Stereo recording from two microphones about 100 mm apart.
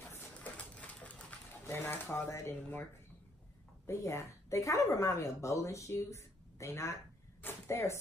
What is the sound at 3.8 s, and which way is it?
A woman's voice, 30° left (ahead or behind).